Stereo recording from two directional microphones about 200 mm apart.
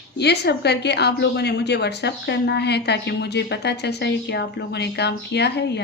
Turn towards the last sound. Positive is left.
turn(degrees=55)  # may be behind; listen again after turning